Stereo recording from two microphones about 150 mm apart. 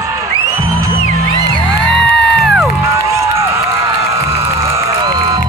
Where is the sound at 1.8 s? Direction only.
Centre (ahead or behind).